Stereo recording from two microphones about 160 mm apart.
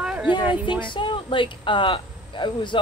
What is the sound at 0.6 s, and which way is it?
Speech, 30° left (ahead or behind).